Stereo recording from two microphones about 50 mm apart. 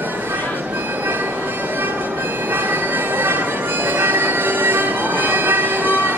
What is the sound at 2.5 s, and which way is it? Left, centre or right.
Music, right.